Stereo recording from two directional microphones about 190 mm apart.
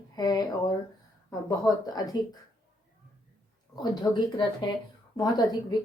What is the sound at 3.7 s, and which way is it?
Speech, 20° left (ahead or behind).